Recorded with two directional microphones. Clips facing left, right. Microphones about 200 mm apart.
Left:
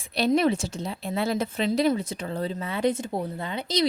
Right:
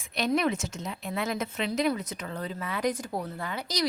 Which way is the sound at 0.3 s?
30° left (ahead or behind).